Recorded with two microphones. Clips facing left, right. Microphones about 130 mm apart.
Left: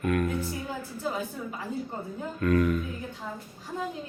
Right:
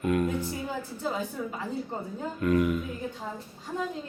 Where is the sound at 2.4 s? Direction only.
15° right (ahead or behind).